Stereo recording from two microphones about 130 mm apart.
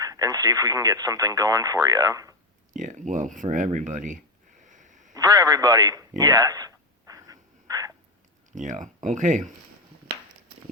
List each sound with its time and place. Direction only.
0.0 s speech: 30° right (ahead or behind)
2.7 s speech: 75° right (ahead or behind)
4.6 s a sound: 75° right (ahead or behind)
5.1 s radio: 30° right (ahead or behind)
8.5 s speech: 75° right (ahead or behind)